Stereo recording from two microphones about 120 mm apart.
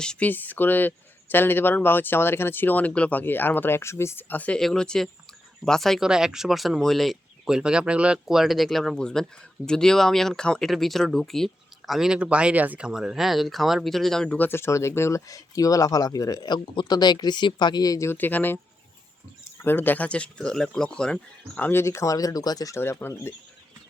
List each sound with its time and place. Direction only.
0.0 s speech: 10° left (ahead or behind)
19.6 s speech: 15° left (ahead or behind)
21.7 s speech: 20° left (ahead or behind)